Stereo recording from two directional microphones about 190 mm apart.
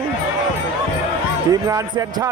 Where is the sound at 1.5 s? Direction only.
20° right (ahead or behind).